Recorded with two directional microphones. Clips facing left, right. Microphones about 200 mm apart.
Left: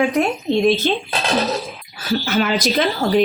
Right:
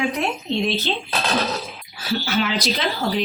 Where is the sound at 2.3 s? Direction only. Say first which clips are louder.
Left 4 dB; 50° left (ahead or behind).